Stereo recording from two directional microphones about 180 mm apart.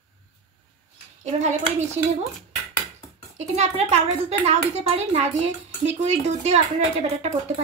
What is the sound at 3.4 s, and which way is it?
A woman's voice, 35° right (ahead or behind).